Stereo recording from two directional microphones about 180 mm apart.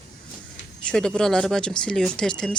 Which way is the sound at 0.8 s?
5° left (ahead or behind).